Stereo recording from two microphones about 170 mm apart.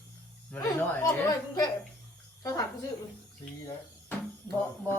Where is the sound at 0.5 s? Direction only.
10° left (ahead or behind).